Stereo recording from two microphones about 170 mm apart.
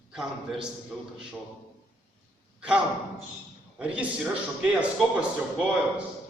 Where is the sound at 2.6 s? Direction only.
5° right (ahead or behind).